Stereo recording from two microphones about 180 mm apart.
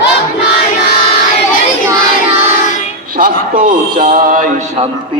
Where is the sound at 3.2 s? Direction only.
50° right (ahead or behind).